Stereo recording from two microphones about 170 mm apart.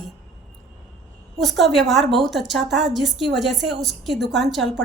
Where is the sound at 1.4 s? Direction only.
Centre (ahead or behind).